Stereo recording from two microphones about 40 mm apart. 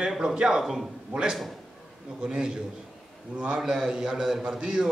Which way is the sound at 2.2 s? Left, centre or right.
Centre.